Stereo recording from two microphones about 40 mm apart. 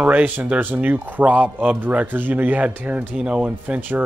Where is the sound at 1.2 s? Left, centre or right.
Right.